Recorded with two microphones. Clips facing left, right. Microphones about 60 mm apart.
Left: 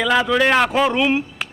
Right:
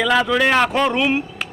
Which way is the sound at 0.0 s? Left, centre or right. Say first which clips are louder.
Even; centre.